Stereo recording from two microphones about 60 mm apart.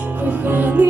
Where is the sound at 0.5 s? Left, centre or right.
Right.